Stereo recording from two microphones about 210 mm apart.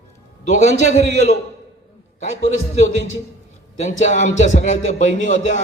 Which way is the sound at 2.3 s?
35° left (ahead or behind).